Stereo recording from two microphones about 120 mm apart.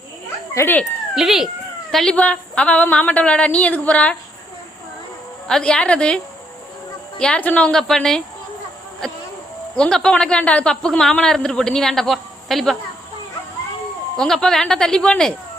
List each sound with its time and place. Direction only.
0.5 s speech: 20° left (ahead or behind)
1.1 s a woman's voice: 5° right (ahead or behind)
5.5 s a woman's voice: 5° left (ahead or behind)
7.2 s speech: 10° left (ahead or behind)
9.7 s speech: 5° left (ahead or behind)
14.2 s speech: 5° left (ahead or behind)